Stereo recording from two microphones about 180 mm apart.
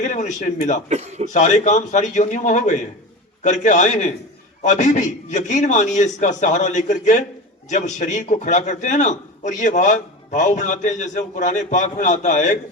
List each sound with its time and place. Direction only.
0.0 s a man's voice: 45° left (ahead or behind)
0.9 s a man's voice: 40° right (ahead or behind)
1.3 s a man's voice: 40° left (ahead or behind)